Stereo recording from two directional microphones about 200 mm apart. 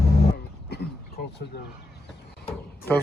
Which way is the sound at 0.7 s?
55° left (ahead or behind).